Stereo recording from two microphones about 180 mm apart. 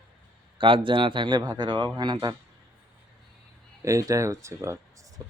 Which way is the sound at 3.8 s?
15° right (ahead or behind).